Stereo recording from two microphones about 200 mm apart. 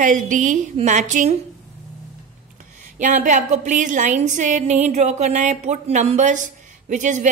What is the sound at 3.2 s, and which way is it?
A woman's voice, 35° right (ahead or behind).